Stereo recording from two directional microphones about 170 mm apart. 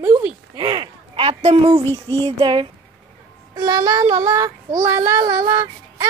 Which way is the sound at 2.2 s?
30° right (ahead or behind).